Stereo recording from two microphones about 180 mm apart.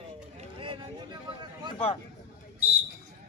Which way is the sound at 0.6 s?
30° right (ahead or behind).